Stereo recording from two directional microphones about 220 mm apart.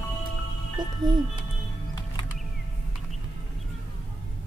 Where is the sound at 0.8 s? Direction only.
20° right (ahead or behind).